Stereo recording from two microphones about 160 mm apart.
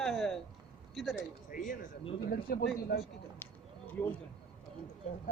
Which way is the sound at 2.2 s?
75° left (ahead or behind).